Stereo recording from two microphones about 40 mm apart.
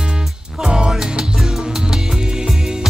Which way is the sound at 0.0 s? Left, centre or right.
Centre.